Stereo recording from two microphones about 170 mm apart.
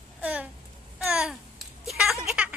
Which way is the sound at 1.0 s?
5° right (ahead or behind).